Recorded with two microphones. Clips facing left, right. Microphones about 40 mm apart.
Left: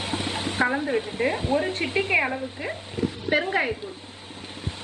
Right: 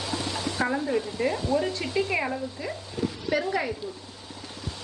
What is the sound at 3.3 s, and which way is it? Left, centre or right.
Speech, left.